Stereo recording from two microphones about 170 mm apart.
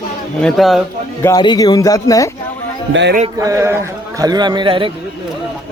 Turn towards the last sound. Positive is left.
turn(degrees=-30)  # may be behind; listen again after turning